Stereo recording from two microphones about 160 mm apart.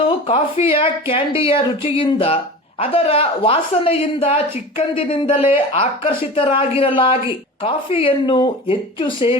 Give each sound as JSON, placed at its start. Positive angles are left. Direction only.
{"t": 0.0, "sound": "speech", "side_deg": 35}